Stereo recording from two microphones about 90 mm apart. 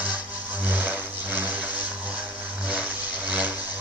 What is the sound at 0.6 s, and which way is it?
Vehicle, 20° right (ahead or behind).